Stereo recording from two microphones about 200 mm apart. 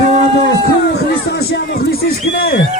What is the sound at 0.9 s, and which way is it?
Speech, 55° left (ahead or behind).